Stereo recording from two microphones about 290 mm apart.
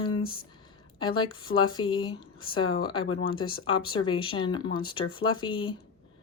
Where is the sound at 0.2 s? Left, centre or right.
Centre.